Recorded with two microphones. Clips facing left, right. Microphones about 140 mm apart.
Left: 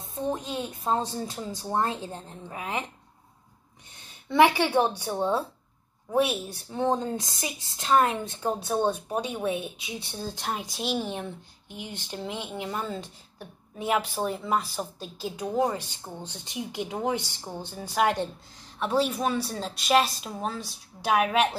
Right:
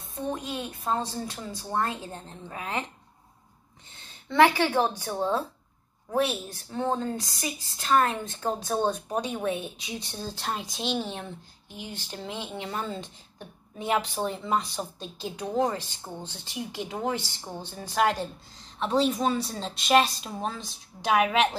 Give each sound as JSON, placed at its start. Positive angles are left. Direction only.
{"t": 0.1, "sound": "a woman's voice", "side_deg": 20}
{"t": 3.9, "sound": "a woman's voice", "side_deg": 10}